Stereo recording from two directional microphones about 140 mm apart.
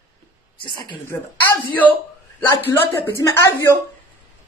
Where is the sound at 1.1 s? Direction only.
20° left (ahead or behind).